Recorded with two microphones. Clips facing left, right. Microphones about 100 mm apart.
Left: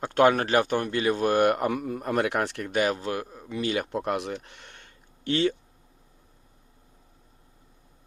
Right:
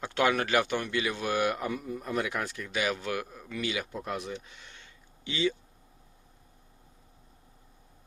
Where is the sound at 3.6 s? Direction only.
50° left (ahead or behind); by 4.3 s 75° left (ahead or behind).